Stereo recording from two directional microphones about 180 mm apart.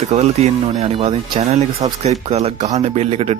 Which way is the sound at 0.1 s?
35° right (ahead or behind).